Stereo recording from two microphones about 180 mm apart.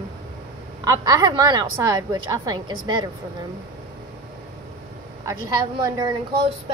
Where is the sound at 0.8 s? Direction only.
20° right (ahead or behind).